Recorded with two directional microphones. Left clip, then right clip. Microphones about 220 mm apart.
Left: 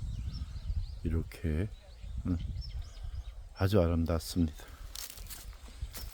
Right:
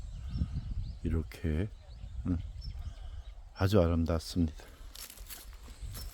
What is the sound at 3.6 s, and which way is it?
Speech, 15° right (ahead or behind).